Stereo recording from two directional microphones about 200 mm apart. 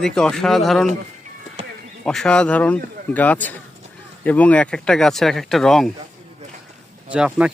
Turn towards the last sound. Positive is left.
turn(degrees=-5)  # may be behind; listen again after turning